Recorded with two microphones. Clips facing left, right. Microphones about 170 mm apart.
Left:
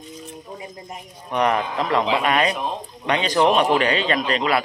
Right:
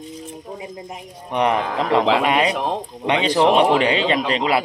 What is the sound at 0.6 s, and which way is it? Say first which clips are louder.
Speech: right 3 dB; 20° right (ahead or behind).